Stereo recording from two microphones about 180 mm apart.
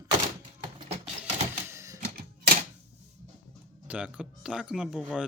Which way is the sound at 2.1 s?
60° right (ahead or behind).